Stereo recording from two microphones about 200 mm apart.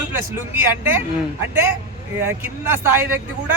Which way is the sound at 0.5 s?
10° right (ahead or behind).